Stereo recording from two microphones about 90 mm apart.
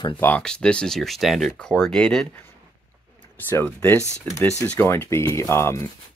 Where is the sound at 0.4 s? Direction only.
10° left (ahead or behind).